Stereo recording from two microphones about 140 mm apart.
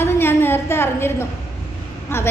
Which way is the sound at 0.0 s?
15° left (ahead or behind).